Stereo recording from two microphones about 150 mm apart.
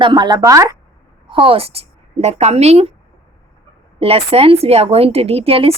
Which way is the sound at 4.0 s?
40° right (ahead or behind).